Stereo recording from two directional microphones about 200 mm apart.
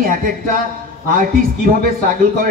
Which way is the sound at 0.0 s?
45° right (ahead or behind).